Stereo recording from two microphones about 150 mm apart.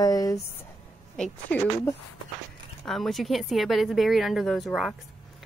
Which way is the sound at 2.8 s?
Centre (ahead or behind).